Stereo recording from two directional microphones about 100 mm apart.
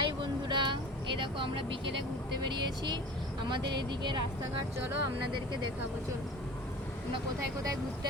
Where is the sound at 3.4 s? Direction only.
50° right (ahead or behind).